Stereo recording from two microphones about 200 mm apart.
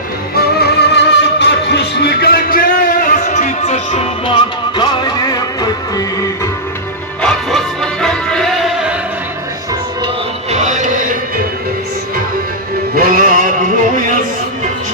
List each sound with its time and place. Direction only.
0.3 s music: 55° left (ahead or behind); by 4.4 s 30° left (ahead or behind)
4.8 s music: 20° left (ahead or behind)
7.2 s music: 5° left (ahead or behind)
10.5 s chant: 35° right (ahead or behind)
13.0 s music: 45° right (ahead or behind)